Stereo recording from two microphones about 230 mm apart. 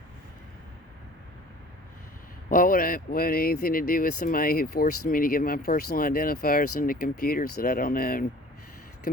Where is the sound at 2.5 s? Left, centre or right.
Left.